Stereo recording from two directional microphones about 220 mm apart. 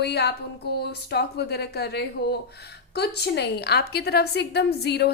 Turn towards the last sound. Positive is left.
turn(degrees=50)  # may be behind; listen again after turning